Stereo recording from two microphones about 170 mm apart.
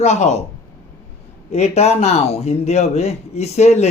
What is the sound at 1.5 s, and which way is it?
Speech, 40° left (ahead or behind).